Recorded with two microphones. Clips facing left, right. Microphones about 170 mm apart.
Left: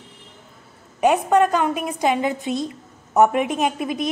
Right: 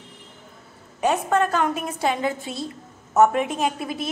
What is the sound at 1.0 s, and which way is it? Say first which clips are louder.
A woman's voice: left 4 dB; 15° left (ahead or behind).